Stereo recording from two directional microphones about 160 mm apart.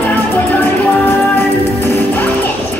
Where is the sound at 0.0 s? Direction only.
10° left (ahead or behind).